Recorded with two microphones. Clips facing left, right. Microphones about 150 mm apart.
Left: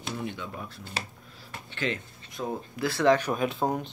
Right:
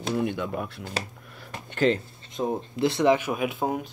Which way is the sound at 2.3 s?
20° right (ahead or behind).